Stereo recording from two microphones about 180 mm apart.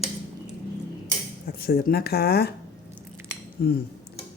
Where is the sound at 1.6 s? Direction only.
60° left (ahead or behind).